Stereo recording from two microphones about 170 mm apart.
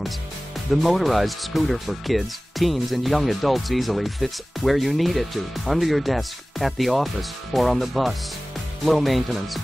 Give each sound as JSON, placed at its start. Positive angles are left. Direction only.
{"t": 0.7, "sound": "speech", "side_deg": 0}